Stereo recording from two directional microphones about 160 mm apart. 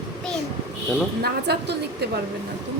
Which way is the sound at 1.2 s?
90° right.